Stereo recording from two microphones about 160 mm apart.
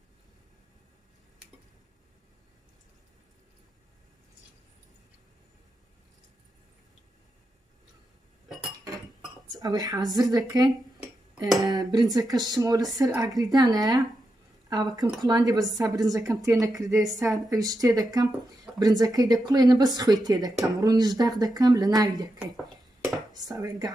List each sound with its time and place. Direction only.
9.6 s speech: 25° right (ahead or behind)
23.3 s speech: 20° right (ahead or behind)